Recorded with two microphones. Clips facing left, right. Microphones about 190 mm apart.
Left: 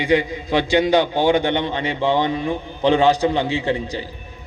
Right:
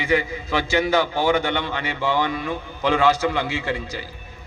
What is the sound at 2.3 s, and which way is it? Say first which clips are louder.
Speech: left 4 dB; 35° left (ahead or behind).